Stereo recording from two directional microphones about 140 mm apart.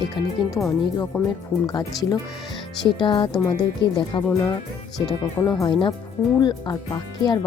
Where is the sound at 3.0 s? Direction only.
35° left (ahead or behind).